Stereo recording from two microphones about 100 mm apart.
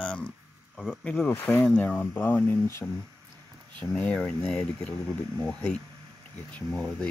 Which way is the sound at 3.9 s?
15° left (ahead or behind).